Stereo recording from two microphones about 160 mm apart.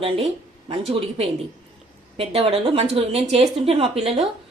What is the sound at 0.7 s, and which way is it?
Speech, 35° right (ahead or behind).